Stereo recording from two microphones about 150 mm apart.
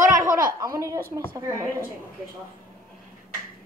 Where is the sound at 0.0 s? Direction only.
65° right (ahead or behind).